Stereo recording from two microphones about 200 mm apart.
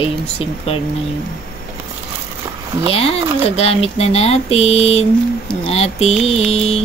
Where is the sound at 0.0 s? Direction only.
30° left (ahead or behind).